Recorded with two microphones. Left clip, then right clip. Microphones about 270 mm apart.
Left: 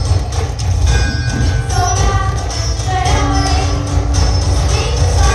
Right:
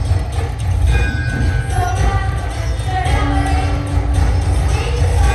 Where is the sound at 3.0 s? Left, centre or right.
Left.